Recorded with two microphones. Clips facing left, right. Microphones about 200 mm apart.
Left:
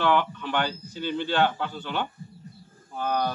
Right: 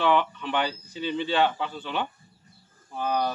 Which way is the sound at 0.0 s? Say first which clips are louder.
Even; centre (ahead or behind).